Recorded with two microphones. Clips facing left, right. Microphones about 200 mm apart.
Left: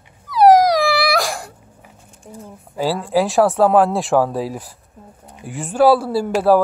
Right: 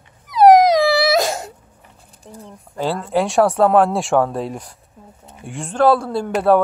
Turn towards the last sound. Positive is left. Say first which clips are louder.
# left 1 dB
turn(degrees=0)  # may be behind; listen again after turning